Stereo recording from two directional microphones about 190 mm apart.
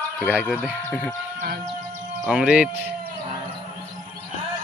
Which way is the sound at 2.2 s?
5° right (ahead or behind).